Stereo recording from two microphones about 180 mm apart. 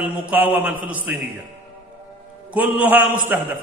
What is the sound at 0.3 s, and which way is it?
Speech, 10° right (ahead or behind).